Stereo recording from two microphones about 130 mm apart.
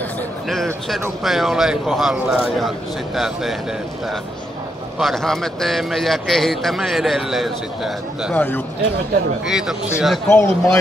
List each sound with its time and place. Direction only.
1.2 s a man's voice: centre (ahead or behind)
4.9 s a man's voice: centre (ahead or behind)
8.3 s a man's voice: 15° left (ahead or behind)
9.5 s a man's voice: 5° right (ahead or behind)
10.2 s a man's voice: 20° left (ahead or behind)